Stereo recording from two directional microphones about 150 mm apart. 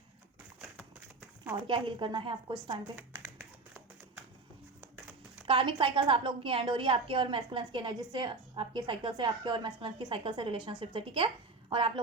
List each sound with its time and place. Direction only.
1.6 s a woman's voice: 35° right (ahead or behind)
2.9 s a sound: 15° right (ahead or behind)
5.5 s a woman's voice: 35° right (ahead or behind)